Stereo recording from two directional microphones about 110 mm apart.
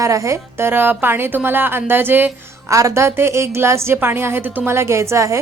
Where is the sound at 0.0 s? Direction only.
30° right (ahead or behind).